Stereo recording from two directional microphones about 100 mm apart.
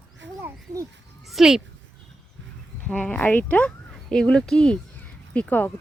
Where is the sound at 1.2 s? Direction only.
5° right (ahead or behind).